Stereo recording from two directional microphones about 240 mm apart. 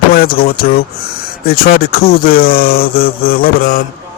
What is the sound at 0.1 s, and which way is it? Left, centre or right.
Speech, left.